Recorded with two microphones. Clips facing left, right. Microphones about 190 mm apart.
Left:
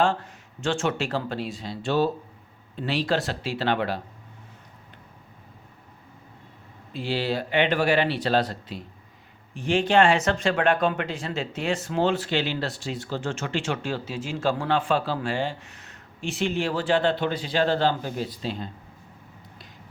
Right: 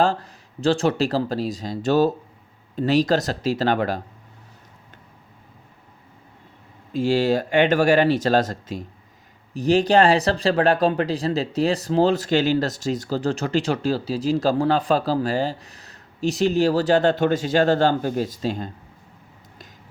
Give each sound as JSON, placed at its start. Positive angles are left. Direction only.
{"t": 0.0, "sound": "speech", "side_deg": -35}
{"t": 6.9, "sound": "speech", "side_deg": -45}